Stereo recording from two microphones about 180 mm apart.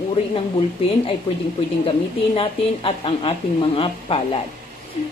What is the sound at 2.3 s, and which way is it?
A woman's voice, 30° left (ahead or behind).